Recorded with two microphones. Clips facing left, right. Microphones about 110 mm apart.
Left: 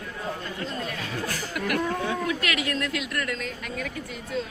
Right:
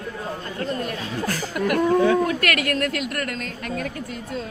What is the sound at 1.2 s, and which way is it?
Chuckle, 45° right (ahead or behind).